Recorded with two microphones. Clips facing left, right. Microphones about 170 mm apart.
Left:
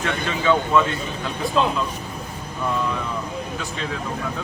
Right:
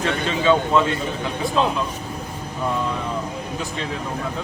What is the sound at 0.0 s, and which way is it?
Speech, 25° right (ahead or behind).